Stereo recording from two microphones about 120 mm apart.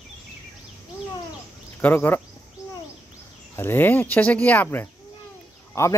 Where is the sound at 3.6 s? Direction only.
15° left (ahead or behind).